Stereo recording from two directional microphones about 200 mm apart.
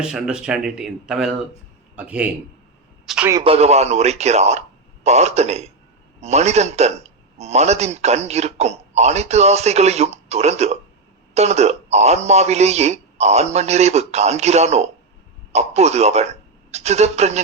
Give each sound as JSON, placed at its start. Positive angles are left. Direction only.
{"t": 0.0, "sound": "a man's voice", "side_deg": -5}
{"t": 3.4, "sound": "a man's voice", "side_deg": -30}